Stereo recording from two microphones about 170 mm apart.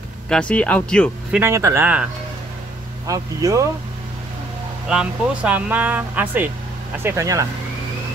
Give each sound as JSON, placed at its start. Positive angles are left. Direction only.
{"t": 0.3, "sound": "speech", "side_deg": 5}
{"t": 1.3, "sound": "speech", "side_deg": -15}
{"t": 3.1, "sound": "speech", "side_deg": -20}
{"t": 4.8, "sound": "speech", "side_deg": -5}